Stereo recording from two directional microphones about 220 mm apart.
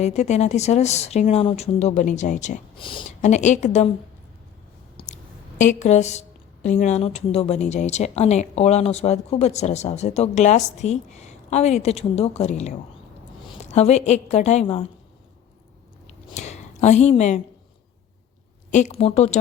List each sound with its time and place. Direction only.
0.0 s speech: 30° left (ahead or behind)
2.7 s speech: 20° left (ahead or behind)
3.2 s speech: 35° left (ahead or behind)
4.9 s speech: 30° left (ahead or behind)
16.3 s a sound: 30° left (ahead or behind)
18.7 s speech: 30° left (ahead or behind)